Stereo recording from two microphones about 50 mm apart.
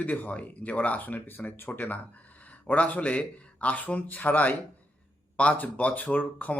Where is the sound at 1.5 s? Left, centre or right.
Left.